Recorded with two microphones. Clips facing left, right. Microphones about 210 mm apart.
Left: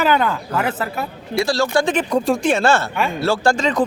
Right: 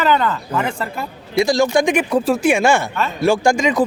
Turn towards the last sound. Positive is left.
turn(degrees=-10)  # may be behind; listen again after turning